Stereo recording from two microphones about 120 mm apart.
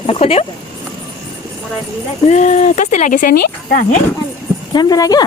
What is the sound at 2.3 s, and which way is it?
Speech, 75° left (ahead or behind).